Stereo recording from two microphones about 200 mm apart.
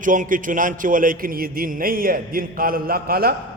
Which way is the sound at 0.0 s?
40° right (ahead or behind).